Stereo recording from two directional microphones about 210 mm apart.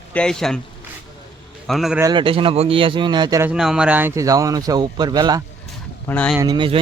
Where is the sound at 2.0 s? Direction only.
25° right (ahead or behind).